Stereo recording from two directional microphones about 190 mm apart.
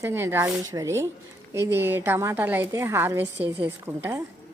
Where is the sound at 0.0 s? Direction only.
15° right (ahead or behind).